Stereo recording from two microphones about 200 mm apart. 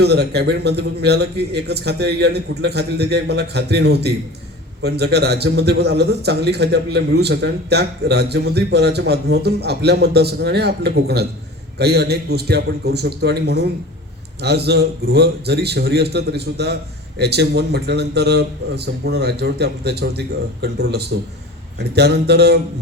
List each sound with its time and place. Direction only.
0.0 s a man's voice: 55° right (ahead or behind)